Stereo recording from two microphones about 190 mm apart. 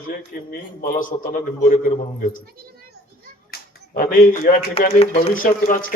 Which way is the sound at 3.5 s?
45° left (ahead or behind).